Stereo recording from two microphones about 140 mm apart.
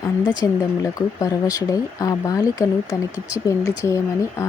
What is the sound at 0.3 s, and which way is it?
Speech, 25° left (ahead or behind).